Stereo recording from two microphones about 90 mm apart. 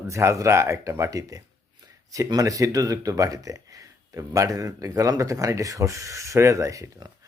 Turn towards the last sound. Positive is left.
turn(degrees=-40)  # may be behind; listen again after turning